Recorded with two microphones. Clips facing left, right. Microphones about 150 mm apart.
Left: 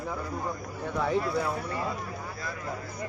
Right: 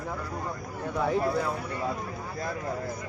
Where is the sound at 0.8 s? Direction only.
5° right (ahead or behind).